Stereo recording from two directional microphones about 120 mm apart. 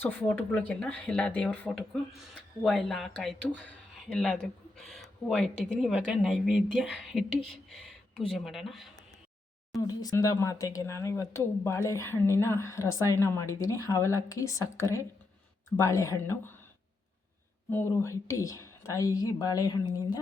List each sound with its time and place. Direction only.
0.0 s speech: 15° left (ahead or behind); by 8.9 s centre (ahead or behind)
9.8 s speech: 30° left (ahead or behind)
17.7 s speech: 20° left (ahead or behind)